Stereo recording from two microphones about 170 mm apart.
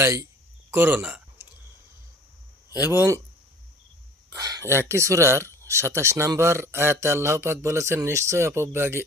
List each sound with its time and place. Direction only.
0.0 s speech: 20° right (ahead or behind)
0.7 s a sound: 15° right (ahead or behind)
2.8 s speech: 15° right (ahead or behind)
4.3 s speech: 20° right (ahead or behind)